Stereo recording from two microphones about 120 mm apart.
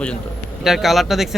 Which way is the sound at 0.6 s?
Centre (ahead or behind).